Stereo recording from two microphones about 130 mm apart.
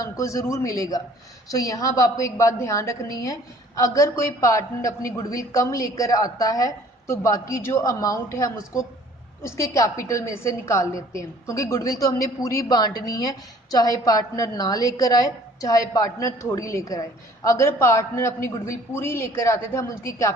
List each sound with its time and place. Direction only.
0.0 s a woman's voice: 25° left (ahead or behind)